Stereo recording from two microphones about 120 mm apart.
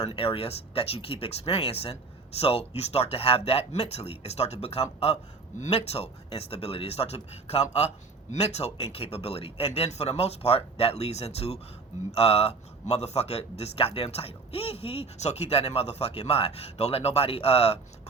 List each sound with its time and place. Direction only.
0.0 s a man's voice: 50° left (ahead or behind)